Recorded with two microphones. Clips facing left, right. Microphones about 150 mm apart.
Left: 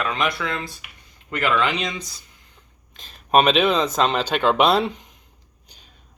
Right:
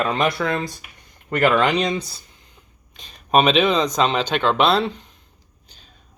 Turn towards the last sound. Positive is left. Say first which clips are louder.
# even
turn(degrees=10)  # may be behind; listen again after turning